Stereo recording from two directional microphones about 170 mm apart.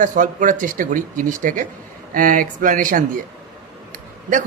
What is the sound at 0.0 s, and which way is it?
Speech, 50° right (ahead or behind).